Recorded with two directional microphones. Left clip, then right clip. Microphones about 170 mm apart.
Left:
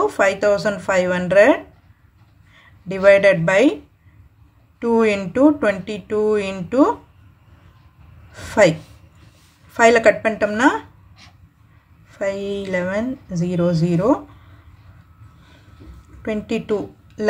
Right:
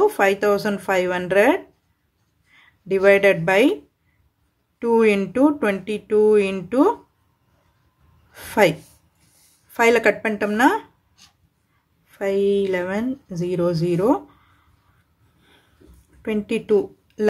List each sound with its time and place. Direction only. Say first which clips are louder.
0.0 s speech: left 1 dB; 40° right (ahead or behind)
4.7 s speech: even; 40° right (ahead or behind)
8.3 s a woman's voice: left 3 dB; 40° right (ahead or behind)
12.1 s speech: right 3 dB; 40° right (ahead or behind)
16.2 s a woman's voice: even; 40° right (ahead or behind)